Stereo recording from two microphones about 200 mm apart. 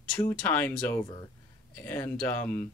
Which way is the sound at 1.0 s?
20° left (ahead or behind).